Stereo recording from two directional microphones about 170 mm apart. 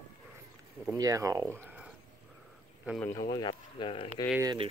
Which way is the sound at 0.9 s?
20° right (ahead or behind).